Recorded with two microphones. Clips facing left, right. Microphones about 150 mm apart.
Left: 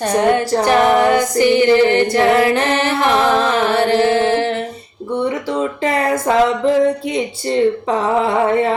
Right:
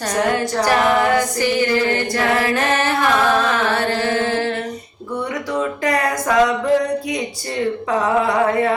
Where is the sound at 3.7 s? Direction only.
20° left (ahead or behind).